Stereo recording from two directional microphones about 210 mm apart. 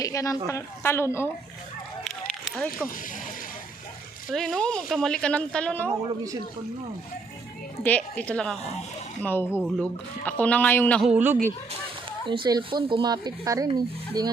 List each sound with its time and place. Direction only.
0.0 s a woman's voice: 15° left (ahead or behind)
2.0 s a sound: centre (ahead or behind)
4.3 s speech: centre (ahead or behind)
7.9 s a woman's voice: 5° left (ahead or behind)
9.5 s speech: 5° right (ahead or behind)
10.2 s a woman's voice: 5° left (ahead or behind)
11.1 s speech: 10° right (ahead or behind)
12.2 s speech: 25° right (ahead or behind)